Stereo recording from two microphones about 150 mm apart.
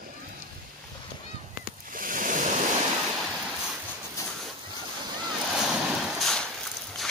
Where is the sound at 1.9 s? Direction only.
65° right (ahead or behind).